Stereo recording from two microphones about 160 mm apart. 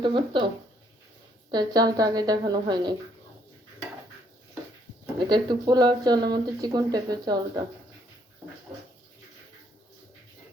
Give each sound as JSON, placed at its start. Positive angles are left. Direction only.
{"t": 0.0, "sound": "speech", "side_deg": -30}
{"t": 1.5, "sound": "speech", "side_deg": -25}
{"t": 5.2, "sound": "speech", "side_deg": -30}